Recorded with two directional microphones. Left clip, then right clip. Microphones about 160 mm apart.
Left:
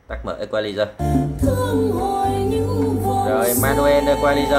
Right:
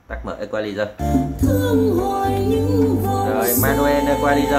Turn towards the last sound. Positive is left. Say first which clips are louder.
# left 1 dB
turn(degrees=5)  # may be behind; listen again after turning